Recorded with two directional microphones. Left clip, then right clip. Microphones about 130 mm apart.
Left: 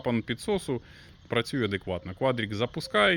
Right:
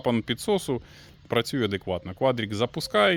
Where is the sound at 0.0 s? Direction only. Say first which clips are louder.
Right 4 dB; 25° right (ahead or behind).